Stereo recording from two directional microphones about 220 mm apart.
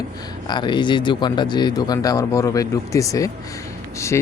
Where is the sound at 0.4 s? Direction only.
20° left (ahead or behind).